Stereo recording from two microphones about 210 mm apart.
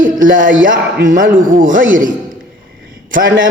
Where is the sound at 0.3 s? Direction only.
40° right (ahead or behind).